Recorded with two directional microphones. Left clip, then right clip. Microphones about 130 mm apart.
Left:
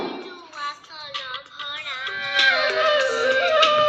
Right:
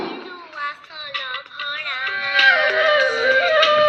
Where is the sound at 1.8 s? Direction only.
20° left (ahead or behind).